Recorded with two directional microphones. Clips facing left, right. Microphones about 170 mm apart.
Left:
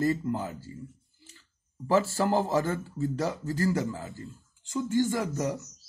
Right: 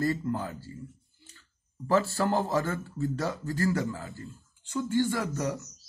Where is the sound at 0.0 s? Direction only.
15° left (ahead or behind).